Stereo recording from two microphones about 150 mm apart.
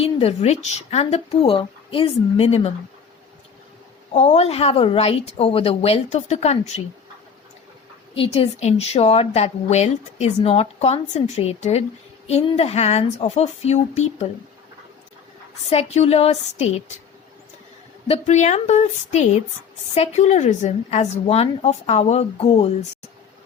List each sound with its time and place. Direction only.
0.0 s a woman's voice: 40° left (ahead or behind)
4.1 s a woman's voice: 45° left (ahead or behind)
8.1 s a woman's voice: 35° left (ahead or behind)
15.7 s a woman's voice: 45° left (ahead or behind)
18.1 s a woman's voice: 50° left (ahead or behind)